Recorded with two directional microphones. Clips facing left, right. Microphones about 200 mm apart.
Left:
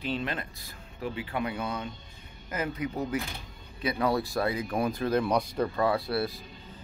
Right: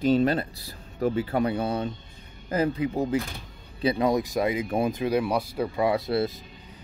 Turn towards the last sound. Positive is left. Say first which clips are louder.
# right 4 dB
turn(degrees=-20)  # may be behind; listen again after turning